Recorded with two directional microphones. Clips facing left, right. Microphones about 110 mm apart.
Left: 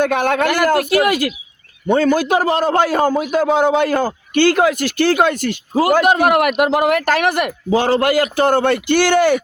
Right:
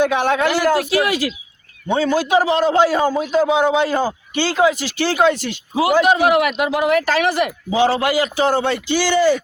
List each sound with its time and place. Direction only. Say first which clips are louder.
0.0 s a man's voice: left 1 dB; 50° left (ahead or behind)